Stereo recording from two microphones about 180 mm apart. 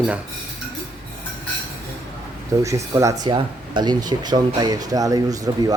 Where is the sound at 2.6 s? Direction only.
15° right (ahead or behind).